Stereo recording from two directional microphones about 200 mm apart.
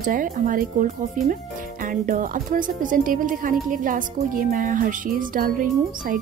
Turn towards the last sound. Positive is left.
turn(degrees=-45)  # may be behind; listen again after turning